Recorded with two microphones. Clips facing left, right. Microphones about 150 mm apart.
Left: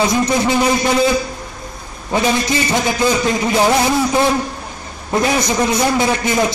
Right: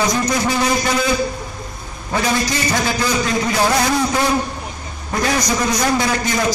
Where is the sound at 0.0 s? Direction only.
25° left (ahead or behind).